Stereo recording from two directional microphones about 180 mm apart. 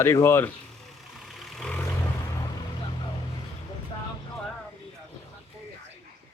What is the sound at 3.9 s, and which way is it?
Vehicle, 30° left (ahead or behind).